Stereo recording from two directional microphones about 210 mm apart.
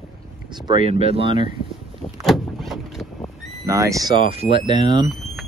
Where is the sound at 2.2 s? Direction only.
Centre (ahead or behind).